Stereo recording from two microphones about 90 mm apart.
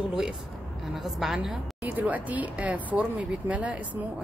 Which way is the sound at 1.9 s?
20° right (ahead or behind).